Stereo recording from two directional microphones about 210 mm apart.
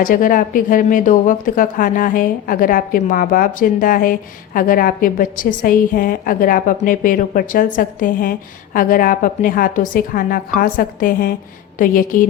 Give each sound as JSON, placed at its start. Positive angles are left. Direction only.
{"t": 0.0, "sound": "a woman's voice", "side_deg": 40}